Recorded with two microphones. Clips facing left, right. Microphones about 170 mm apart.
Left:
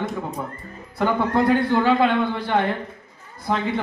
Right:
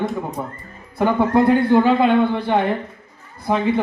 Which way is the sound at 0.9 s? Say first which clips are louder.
Right 4 dB; 15° right (ahead or behind).